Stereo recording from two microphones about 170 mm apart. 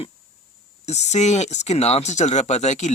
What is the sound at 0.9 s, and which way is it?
Speech, 40° left (ahead or behind).